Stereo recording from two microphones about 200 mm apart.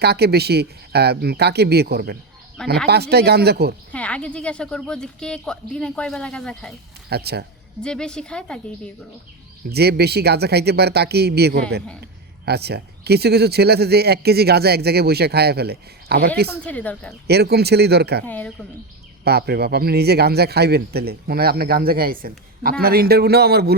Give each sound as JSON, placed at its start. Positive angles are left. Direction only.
{"t": 0.0, "sound": "speech", "side_deg": -55}
{"t": 3.9, "sound": "speech", "side_deg": 5}
{"t": 7.1, "sound": "speech", "side_deg": -55}
{"t": 7.8, "sound": "speech", "side_deg": 5}
{"t": 9.6, "sound": "speech", "side_deg": -55}
{"t": 16.6, "sound": "speech", "side_deg": 5}
{"t": 17.2, "sound": "speech", "side_deg": -55}
{"t": 18.3, "sound": "speech", "side_deg": 10}
{"t": 19.2, "sound": "speech", "side_deg": -55}